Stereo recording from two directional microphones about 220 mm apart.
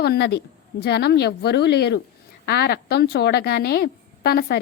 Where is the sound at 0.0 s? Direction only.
45° left (ahead or behind).